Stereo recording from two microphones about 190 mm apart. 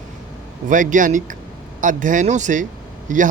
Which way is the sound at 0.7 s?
45° right (ahead or behind).